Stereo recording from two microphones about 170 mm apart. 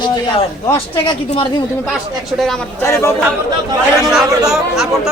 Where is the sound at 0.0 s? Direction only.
30° left (ahead or behind).